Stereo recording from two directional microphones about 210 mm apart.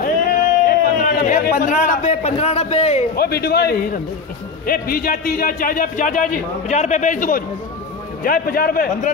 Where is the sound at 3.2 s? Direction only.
50° left (ahead or behind).